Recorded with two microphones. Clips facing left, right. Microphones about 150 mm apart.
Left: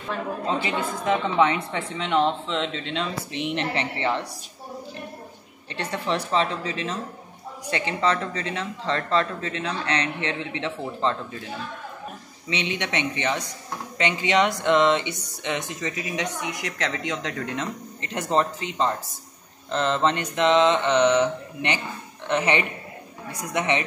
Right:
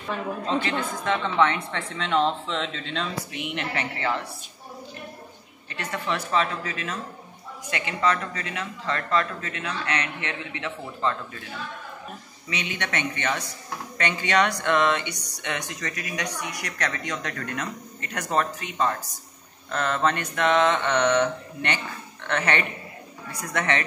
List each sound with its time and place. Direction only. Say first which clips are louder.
0.1 s speech: even; 5° left (ahead or behind)
1.1 s speech: left 1 dB; 15° left (ahead or behind)
3.3 s speech: left 6 dB; 30° left (ahead or behind)
5.8 s speech: left 2 dB; 30° left (ahead or behind)
12.4 s a man's voice: left 3 dB; 25° left (ahead or behind)